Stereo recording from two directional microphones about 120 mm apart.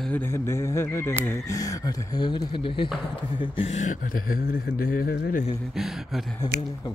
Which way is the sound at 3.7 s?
90° left.